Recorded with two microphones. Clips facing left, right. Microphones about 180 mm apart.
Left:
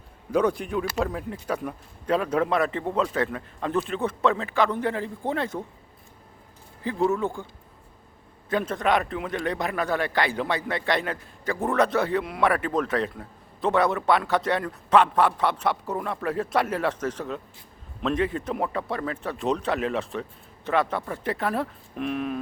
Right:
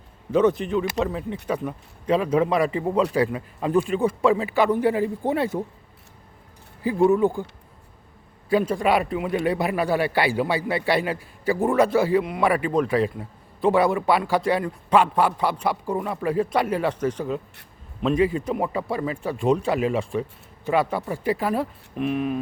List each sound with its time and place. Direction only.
0.3 s speech: 10° left (ahead or behind); by 5.6 s 10° right (ahead or behind)
7.1 s speech: 15° right (ahead or behind)
8.4 s a man's voice: 5° right (ahead or behind)